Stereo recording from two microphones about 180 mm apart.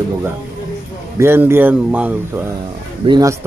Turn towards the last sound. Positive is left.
turn(degrees=-15)  # may be behind; listen again after turning